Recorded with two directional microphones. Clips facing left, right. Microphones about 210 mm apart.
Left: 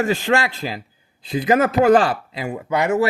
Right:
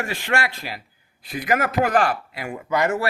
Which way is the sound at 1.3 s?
25° left (ahead or behind).